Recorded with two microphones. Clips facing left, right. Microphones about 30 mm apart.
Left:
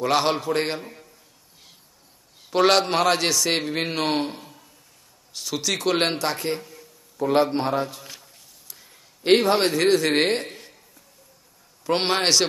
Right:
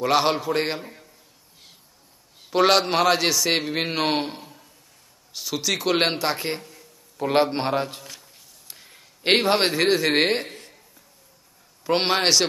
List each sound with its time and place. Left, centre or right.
0.0 s a man's voice: centre
2.5 s a man's voice: centre
7.2 s a man's voice: right
8.6 s a sound: right
9.6 s speech: centre
11.8 s a man's voice: centre